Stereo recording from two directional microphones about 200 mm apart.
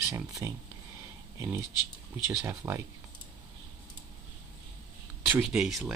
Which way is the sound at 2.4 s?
15° right (ahead or behind).